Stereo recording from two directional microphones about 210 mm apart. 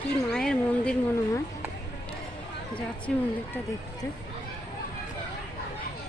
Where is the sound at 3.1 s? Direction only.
Centre (ahead or behind).